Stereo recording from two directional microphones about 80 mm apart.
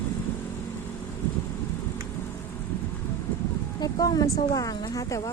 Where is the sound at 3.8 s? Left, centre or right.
Left.